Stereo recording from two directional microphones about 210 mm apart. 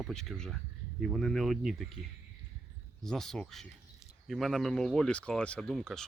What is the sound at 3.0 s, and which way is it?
Speech, centre (ahead or behind).